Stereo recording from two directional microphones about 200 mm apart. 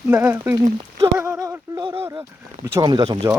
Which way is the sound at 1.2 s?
10° right (ahead or behind).